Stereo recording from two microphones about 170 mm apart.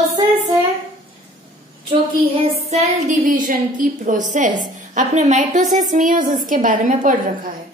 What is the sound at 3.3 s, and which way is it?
A woman's voice, 50° right (ahead or behind).